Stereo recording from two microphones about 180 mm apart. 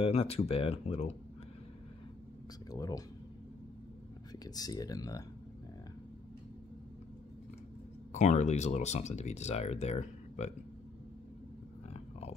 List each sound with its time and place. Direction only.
0.0 s speech: 30° left (ahead or behind)
2.7 s speech: 20° left (ahead or behind)
4.5 s speech: 20° left (ahead or behind)
8.1 s speech: 40° left (ahead or behind)
11.9 s a sound: 35° left (ahead or behind)